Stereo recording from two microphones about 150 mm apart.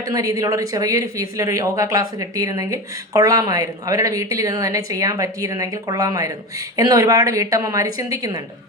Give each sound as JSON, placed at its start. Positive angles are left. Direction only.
{"t": 0.1, "sound": "speech", "side_deg": -20}